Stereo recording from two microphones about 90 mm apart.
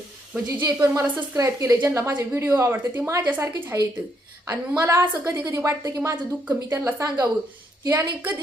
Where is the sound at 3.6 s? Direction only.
30° right (ahead or behind).